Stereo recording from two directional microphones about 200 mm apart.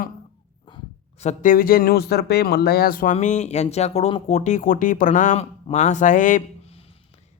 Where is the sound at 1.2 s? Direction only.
40° left (ahead or behind).